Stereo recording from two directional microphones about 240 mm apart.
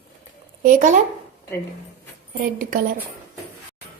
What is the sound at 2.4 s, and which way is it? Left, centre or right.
Speech, right.